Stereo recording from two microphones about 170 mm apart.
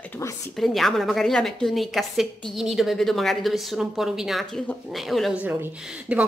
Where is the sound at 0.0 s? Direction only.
10° left (ahead or behind).